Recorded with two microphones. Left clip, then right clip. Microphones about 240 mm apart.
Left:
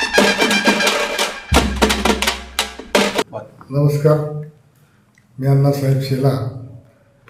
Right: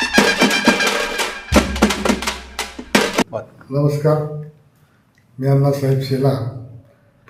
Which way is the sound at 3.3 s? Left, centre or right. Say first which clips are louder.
Right 3 dB; right.